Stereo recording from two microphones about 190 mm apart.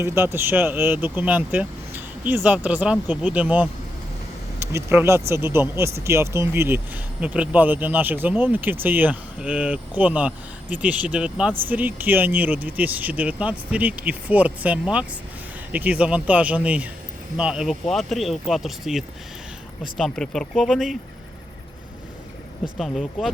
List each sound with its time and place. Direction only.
0.0 s speech: 15° right (ahead or behind)
22.6 s speech: centre (ahead or behind)